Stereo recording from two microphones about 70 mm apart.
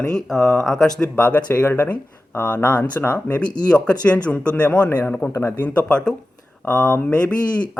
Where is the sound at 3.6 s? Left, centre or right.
Centre.